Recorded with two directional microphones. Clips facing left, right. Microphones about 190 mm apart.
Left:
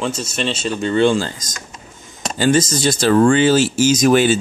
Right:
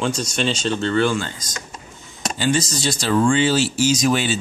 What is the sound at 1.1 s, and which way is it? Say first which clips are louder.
Speech: left 5 dB; 35° left (ahead or behind).